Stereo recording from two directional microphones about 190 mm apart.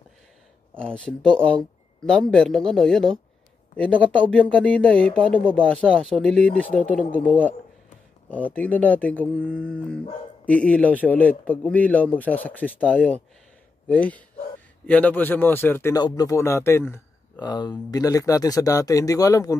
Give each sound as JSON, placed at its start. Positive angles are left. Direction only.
{"t": 0.7, "sound": "speech", "side_deg": 5}